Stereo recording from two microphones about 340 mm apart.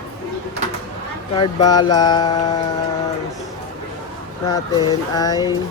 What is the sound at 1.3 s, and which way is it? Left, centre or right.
Speech, centre.